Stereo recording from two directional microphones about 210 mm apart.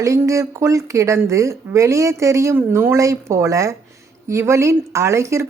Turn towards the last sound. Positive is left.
turn(degrees=-15)  # may be behind; listen again after turning